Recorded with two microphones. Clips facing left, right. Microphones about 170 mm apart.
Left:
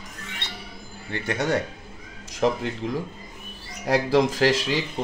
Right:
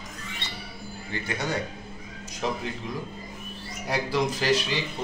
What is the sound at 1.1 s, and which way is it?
Speech, 65° left (ahead or behind).